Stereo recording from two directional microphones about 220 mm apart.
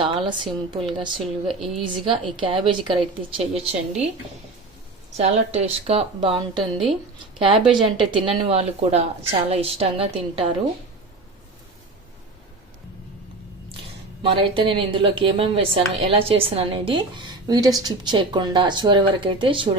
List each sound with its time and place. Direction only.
0.0 s a woman's voice: 20° right (ahead or behind)
5.1 s a woman's voice: 30° right (ahead or behind)
14.2 s a woman's voice: 25° right (ahead or behind)